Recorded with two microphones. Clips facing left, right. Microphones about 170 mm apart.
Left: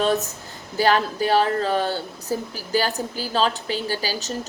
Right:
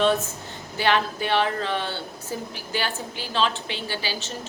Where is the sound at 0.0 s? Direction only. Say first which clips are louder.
Even; 40° left (ahead or behind).